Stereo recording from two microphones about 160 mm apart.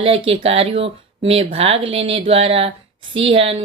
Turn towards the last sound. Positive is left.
turn(degrees=-35)  # may be behind; listen again after turning